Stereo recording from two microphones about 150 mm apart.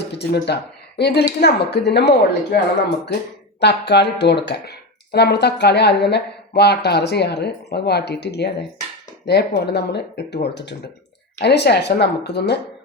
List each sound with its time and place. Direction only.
0.2 s speech: 90° left
3.6 s speech: 90° left